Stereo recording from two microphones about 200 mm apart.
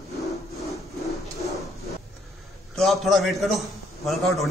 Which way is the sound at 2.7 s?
Centre (ahead or behind).